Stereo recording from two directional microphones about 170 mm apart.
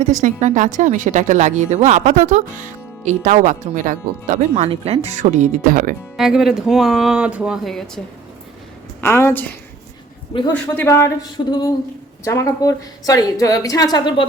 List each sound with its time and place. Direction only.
0.0 s a woman's voice: 50° right (ahead or behind)
6.1 s speech: 5° right (ahead or behind)
9.0 s a woman's voice: 15° left (ahead or behind)
10.3 s a man's voice: 35° left (ahead or behind)
10.8 s a woman's voice: 15° left (ahead or behind)
11.4 s a woman's voice: 30° left (ahead or behind)
12.2 s a woman's voice: 20° left (ahead or behind)